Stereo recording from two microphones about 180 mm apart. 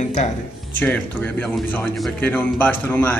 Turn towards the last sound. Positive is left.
turn(degrees=10)  # may be behind; listen again after turning